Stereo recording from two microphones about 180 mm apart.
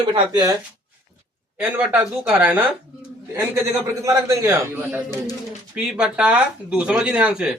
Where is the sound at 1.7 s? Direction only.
10° right (ahead or behind).